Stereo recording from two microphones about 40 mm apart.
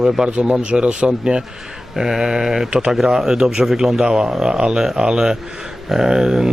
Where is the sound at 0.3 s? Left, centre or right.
Right.